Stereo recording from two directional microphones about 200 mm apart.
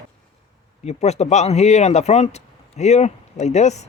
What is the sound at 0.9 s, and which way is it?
Speech, 35° left (ahead or behind).